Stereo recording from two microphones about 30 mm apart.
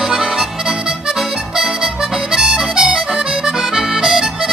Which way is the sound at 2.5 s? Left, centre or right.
Right.